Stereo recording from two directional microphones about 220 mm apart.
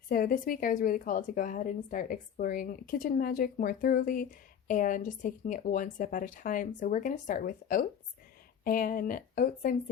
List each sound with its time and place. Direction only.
0.1 s a woman's voice: 40° left (ahead or behind)